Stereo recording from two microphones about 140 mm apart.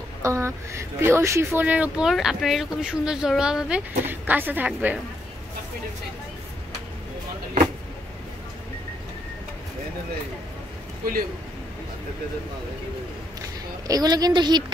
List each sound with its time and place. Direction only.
0.2 s speech: 20° right (ahead or behind)
13.8 s a woman's voice: 25° right (ahead or behind)